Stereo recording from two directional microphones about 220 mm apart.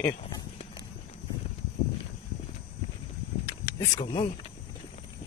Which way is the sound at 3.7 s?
15° left (ahead or behind).